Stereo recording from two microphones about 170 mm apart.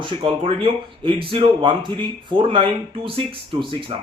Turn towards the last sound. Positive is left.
turn(degrees=-30)  # may be behind; listen again after turning